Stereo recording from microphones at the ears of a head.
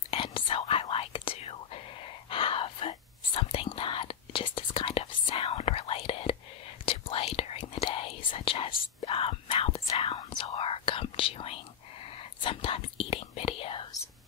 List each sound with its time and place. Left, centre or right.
0.1 s whispering: left